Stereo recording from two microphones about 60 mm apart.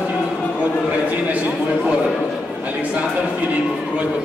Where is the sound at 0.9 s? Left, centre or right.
Right.